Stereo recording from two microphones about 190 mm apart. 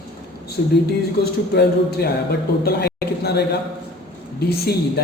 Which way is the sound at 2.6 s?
55° left (ahead or behind).